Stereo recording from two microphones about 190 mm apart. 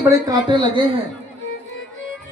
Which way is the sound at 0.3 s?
25° right (ahead or behind).